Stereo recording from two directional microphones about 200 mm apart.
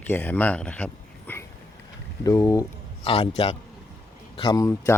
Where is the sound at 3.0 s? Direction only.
30° left (ahead or behind).